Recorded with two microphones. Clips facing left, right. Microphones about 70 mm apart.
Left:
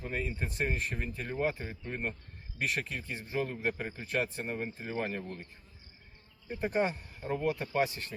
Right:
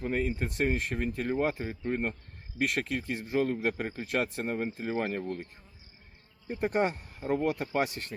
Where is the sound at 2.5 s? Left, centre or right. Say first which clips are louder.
Right 4 dB; right.